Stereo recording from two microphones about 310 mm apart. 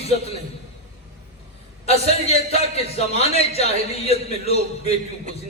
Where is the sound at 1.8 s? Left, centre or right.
Centre.